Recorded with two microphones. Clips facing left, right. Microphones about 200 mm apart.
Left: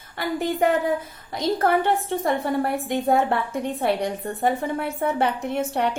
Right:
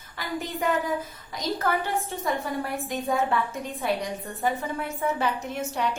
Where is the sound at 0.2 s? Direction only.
60° left (ahead or behind).